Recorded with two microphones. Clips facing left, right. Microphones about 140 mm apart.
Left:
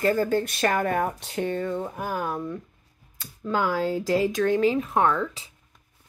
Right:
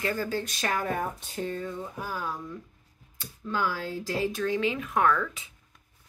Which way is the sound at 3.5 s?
90° left.